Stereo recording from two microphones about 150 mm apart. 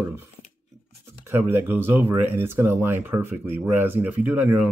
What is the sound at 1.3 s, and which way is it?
Speech, 15° right (ahead or behind).